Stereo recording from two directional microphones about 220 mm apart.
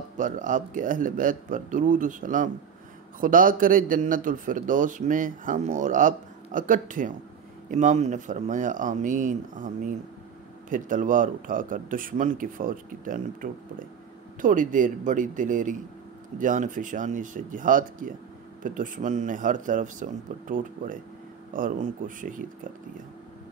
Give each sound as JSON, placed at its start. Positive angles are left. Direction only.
{"t": 0.2, "sound": "a man's voice", "side_deg": -35}